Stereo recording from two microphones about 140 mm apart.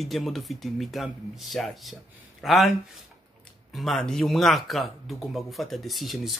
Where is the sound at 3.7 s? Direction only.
Centre (ahead or behind).